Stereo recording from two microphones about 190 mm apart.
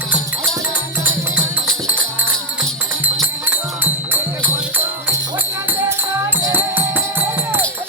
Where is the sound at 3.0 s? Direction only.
10° right (ahead or behind).